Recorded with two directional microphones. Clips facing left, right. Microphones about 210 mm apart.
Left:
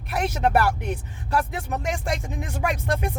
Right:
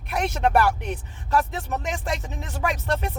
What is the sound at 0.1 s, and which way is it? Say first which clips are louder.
Speech: even; 5° left (ahead or behind).